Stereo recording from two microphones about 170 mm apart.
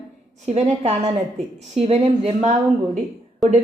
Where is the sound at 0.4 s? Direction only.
40° right (ahead or behind).